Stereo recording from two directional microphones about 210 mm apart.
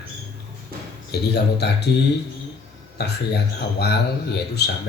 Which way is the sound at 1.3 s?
50° left (ahead or behind).